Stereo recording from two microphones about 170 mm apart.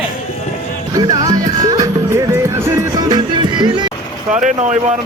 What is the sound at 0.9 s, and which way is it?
Music, 20° right (ahead or behind).